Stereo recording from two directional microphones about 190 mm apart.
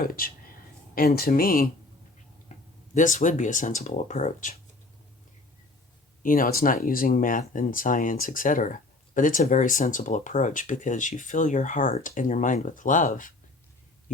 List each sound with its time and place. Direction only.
0.0 s speech: 50° left (ahead or behind)
2.9 s speech: 40° left (ahead or behind)
6.2 s speech: 45° left (ahead or behind)